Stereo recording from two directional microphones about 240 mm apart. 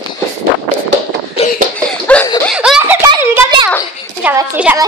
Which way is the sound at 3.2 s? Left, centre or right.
Centre.